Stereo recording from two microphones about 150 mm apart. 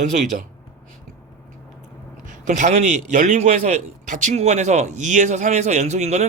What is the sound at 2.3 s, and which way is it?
Speech, 60° right (ahead or behind).